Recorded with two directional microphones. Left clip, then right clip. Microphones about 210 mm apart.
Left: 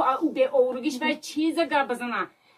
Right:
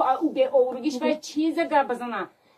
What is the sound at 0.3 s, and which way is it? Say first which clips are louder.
A woman's voice: right 1 dB; 20° left (ahead or behind).